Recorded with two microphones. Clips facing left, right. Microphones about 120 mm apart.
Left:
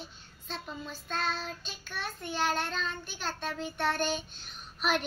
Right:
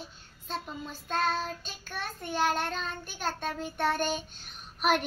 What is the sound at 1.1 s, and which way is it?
Child singing, 50° right (ahead or behind).